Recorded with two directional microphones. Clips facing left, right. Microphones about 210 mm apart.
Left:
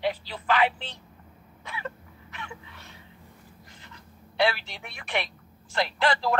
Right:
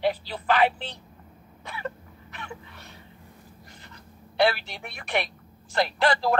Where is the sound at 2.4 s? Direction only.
40° right (ahead or behind).